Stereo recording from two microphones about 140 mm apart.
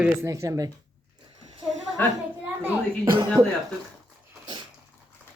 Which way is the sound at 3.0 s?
35° right (ahead or behind).